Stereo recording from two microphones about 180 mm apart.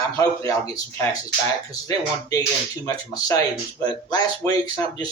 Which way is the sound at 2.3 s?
20° left (ahead or behind).